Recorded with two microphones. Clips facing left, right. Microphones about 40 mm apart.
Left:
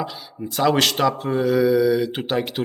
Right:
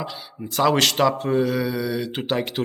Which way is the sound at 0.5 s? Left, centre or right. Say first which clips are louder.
Even; centre.